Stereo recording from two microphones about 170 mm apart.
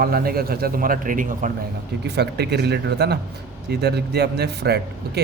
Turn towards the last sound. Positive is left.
turn(degrees=-70)  # may be behind; listen again after turning